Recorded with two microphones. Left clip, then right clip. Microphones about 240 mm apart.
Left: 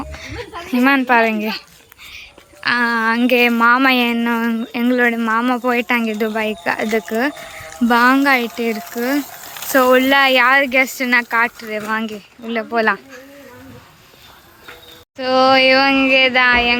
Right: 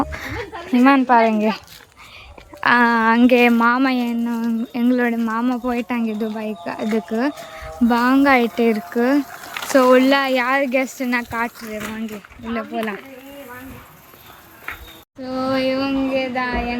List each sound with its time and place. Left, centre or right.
0.0 s a sound: right
0.6 s a woman's voice: centre
15.2 s a woman's voice: centre